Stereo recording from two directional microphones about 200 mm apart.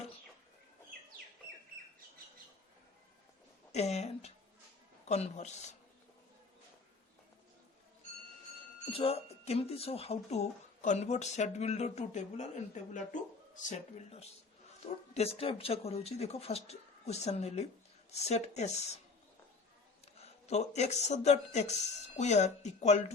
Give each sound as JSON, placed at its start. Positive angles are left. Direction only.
{"t": 3.7, "sound": "speech", "side_deg": 35}
{"t": 8.9, "sound": "speech", "side_deg": 30}
{"t": 20.1, "sound": "speech", "side_deg": 30}